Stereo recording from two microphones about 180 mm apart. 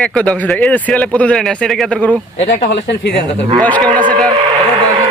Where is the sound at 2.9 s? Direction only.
65° left (ahead or behind).